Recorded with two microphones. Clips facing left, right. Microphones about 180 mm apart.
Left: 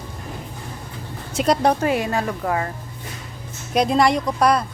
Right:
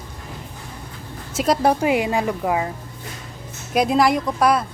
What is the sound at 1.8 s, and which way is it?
Speech, 15° right (ahead or behind).